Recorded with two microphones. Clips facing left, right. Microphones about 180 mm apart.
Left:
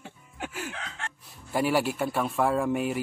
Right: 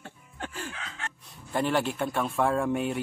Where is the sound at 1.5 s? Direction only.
5° left (ahead or behind).